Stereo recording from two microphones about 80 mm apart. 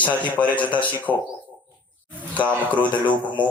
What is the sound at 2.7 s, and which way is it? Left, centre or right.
Speech, left.